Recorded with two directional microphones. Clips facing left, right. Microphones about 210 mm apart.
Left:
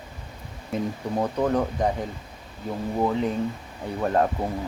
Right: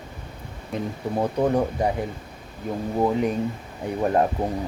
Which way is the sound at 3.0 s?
15° right (ahead or behind).